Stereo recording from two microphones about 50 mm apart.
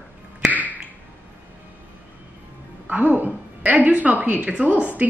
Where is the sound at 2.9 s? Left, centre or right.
Right.